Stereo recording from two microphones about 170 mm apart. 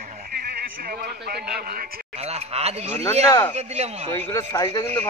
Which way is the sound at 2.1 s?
40° right (ahead or behind).